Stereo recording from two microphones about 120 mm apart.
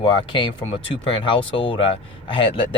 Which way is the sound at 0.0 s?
40° left (ahead or behind).